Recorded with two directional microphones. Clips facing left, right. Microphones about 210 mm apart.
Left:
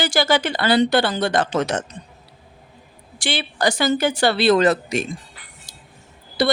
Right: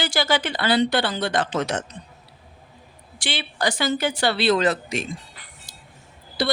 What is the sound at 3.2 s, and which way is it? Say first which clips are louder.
Speech: left 4 dB; 45° left (ahead or behind).